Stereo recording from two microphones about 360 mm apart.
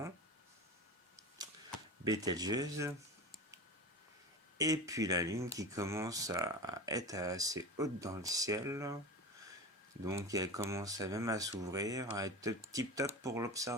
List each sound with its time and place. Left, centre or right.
1.4 s a sound: centre
2.0 s speech: centre
4.5 s speech: centre
10.1 s speech: centre